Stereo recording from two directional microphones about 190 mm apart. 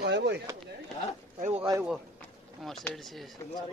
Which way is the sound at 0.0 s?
60° right (ahead or behind).